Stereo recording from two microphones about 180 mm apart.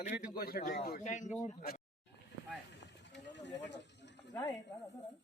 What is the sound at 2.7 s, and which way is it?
Snake, 75° left (ahead or behind).